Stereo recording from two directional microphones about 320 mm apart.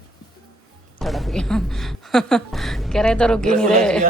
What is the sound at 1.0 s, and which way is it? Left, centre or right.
A woman's voice, centre.